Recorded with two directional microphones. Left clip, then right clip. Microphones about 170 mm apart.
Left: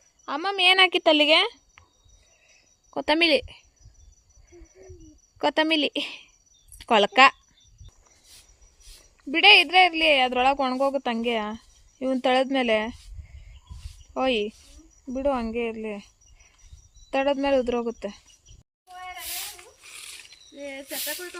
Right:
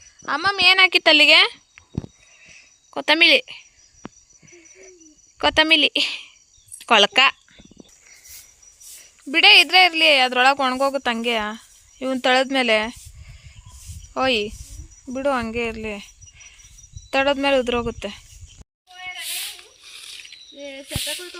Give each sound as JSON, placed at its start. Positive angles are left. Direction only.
{"t": 0.3, "sound": "a woman's voice", "side_deg": 0}
{"t": 0.5, "sound": "a woman's voice", "side_deg": 30}
{"t": 0.9, "sound": "a woman's voice", "side_deg": 15}
{"t": 2.5, "sound": "cricket", "side_deg": 10}
{"t": 5.4, "sound": "a woman's voice", "side_deg": 10}
{"t": 9.3, "sound": "a woman's voice", "side_deg": -5}
{"t": 14.1, "sound": "a woman's voice", "side_deg": 0}
{"t": 18.9, "sound": "a sound", "side_deg": 50}
{"t": 19.8, "sound": "a sound", "side_deg": 25}
{"t": 20.6, "sound": "a woman's voice", "side_deg": 0}